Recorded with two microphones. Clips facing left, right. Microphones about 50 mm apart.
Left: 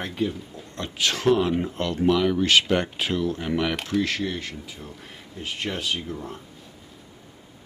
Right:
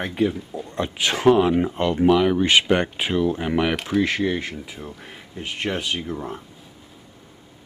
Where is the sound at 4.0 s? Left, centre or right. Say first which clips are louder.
Right 5 dB; centre.